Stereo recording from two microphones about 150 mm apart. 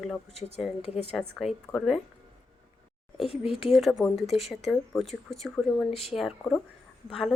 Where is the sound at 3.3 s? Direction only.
40° left (ahead or behind).